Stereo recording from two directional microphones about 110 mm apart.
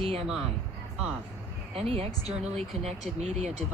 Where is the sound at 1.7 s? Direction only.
65° right (ahead or behind).